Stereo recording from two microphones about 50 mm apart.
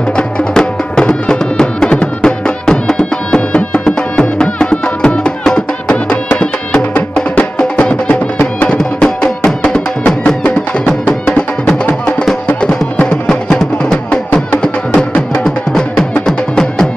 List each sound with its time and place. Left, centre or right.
0.1 s music: centre
8.1 s music: left
8.6 s music: centre
11.2 s music: left